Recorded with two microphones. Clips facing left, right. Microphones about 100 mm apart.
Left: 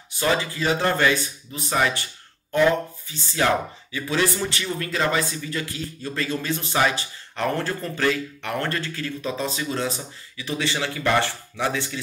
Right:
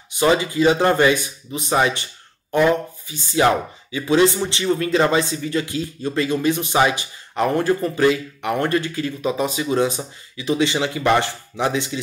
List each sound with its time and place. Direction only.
0.1 s speech: 20° right (ahead or behind)